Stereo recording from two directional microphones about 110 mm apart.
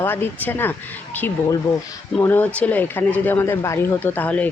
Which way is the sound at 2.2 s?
20° left (ahead or behind).